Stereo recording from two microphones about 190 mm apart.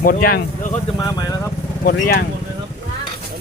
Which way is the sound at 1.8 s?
55° left (ahead or behind).